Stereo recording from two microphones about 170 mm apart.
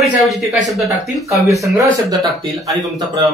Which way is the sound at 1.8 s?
20° right (ahead or behind).